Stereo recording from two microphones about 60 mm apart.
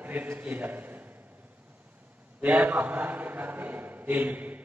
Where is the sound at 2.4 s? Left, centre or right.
Right.